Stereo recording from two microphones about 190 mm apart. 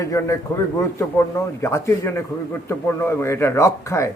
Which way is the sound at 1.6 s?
15° left (ahead or behind).